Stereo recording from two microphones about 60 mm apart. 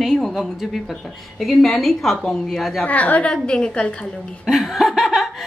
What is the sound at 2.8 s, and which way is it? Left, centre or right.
A woman's voice, left.